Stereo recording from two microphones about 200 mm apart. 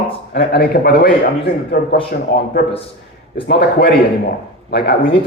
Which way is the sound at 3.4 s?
50° left (ahead or behind).